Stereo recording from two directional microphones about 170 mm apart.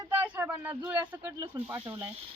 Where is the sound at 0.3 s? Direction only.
10° right (ahead or behind).